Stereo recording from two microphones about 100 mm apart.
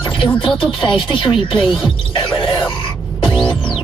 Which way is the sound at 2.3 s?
55° left (ahead or behind).